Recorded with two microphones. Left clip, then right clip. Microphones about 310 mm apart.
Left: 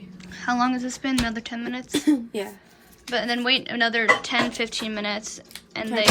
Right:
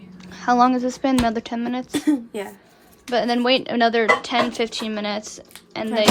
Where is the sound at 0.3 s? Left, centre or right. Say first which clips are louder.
Right 7 dB; centre.